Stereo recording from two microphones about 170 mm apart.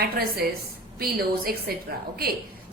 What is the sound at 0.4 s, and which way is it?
A woman's voice, 60° right (ahead or behind).